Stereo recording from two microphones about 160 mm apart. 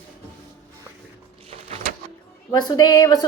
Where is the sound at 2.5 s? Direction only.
25° left (ahead or behind).